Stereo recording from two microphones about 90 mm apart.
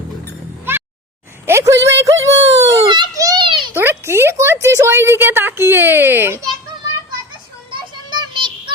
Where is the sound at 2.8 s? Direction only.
60° right (ahead or behind).